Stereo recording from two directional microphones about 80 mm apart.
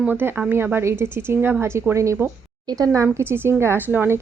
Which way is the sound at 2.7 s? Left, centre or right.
Right.